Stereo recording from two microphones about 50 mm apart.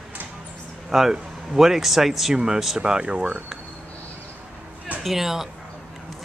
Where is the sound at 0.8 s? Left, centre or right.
Centre.